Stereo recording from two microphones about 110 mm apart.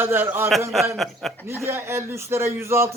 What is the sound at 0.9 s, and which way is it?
Speech, centre (ahead or behind).